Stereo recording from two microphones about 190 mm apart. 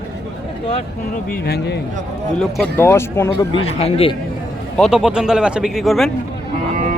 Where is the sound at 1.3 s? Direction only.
55° left (ahead or behind).